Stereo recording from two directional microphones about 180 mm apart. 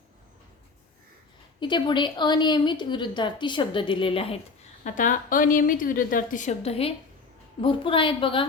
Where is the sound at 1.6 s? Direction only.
25° left (ahead or behind).